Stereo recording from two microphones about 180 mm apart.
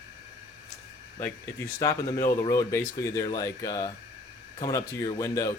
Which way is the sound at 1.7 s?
20° left (ahead or behind).